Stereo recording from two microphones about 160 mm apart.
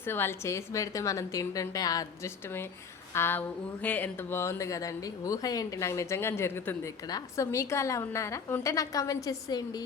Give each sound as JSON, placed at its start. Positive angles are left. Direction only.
{"t": 0.0, "sound": "speech", "side_deg": 15}